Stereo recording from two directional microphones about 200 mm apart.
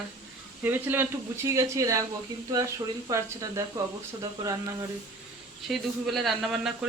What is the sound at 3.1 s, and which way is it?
Speech, 15° right (ahead or behind).